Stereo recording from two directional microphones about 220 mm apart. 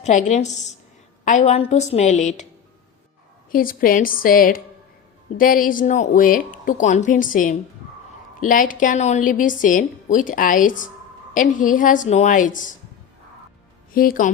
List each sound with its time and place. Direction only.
0.0 s a woman's voice: 35° left (ahead or behind)
3.5 s a woman's voice: 40° left (ahead or behind)
13.9 s a woman's voice: 40° left (ahead or behind)